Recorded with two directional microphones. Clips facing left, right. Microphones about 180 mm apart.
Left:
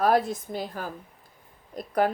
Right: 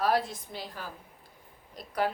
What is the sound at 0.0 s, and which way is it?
A woman's voice, 50° left (ahead or behind).